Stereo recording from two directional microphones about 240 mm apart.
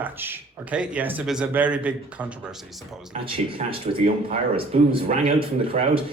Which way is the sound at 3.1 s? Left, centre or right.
Right.